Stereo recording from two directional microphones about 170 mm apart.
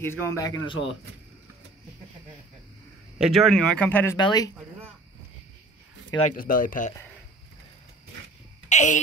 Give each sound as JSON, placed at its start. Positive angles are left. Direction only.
{"t": 0.0, "sound": "a man's voice", "side_deg": 15}
{"t": 3.2, "sound": "speech", "side_deg": 0}
{"t": 4.2, "sound": "speech", "side_deg": 25}
{"t": 6.2, "sound": "speech", "side_deg": 55}
{"t": 8.6, "sound": "a sound", "side_deg": 45}